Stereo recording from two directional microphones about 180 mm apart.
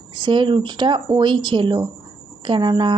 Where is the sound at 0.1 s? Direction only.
25° right (ahead or behind).